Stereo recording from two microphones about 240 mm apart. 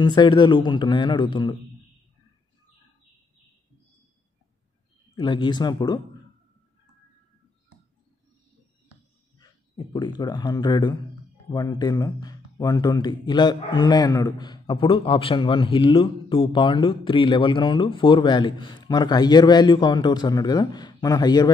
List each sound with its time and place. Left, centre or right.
0.0 s speech: centre
5.1 s speech: centre
9.9 s speech: centre